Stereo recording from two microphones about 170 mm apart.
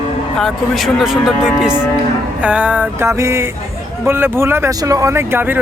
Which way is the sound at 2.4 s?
5° right (ahead or behind).